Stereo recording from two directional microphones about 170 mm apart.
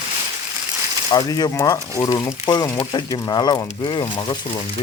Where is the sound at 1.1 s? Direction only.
25° left (ahead or behind).